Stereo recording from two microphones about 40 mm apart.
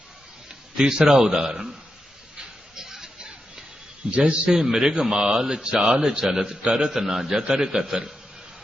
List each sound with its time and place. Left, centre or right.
0.8 s a man's voice: centre
2.7 s a sound: centre
4.1 s a man's voice: right
4.4 s a man's voice: centre